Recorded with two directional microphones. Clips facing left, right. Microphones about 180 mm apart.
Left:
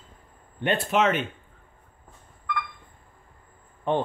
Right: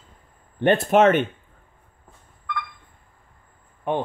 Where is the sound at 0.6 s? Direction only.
50° right (ahead or behind).